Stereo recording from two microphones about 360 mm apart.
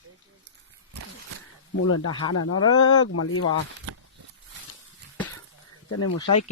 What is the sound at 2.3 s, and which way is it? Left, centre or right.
Speech, left.